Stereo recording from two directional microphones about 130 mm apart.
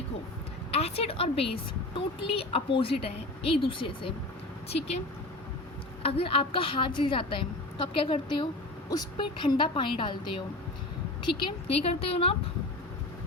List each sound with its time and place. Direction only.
0.7 s speech: 50° left (ahead or behind)
6.0 s a woman's voice: 45° left (ahead or behind)
11.8 s speech: 50° left (ahead or behind)